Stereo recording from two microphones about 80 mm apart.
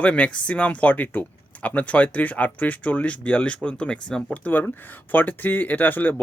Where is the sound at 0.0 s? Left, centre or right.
Centre.